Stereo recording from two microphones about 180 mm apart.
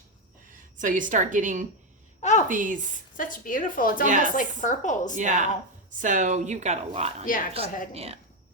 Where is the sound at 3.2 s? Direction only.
50° left (ahead or behind).